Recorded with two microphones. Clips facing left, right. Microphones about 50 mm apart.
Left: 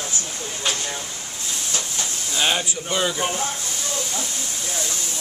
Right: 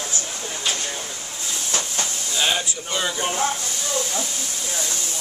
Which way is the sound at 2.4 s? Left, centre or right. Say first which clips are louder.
Left 1 dB; centre.